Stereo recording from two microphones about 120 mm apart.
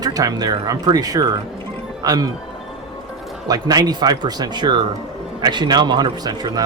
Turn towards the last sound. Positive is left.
turn(degrees=-35)  # may be behind; listen again after turning